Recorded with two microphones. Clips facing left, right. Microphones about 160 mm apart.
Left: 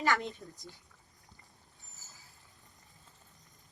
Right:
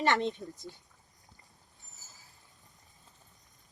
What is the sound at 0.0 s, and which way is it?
Speech, 25° right (ahead or behind).